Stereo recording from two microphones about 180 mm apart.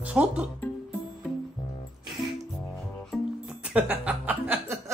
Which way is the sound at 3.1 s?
5° right (ahead or behind).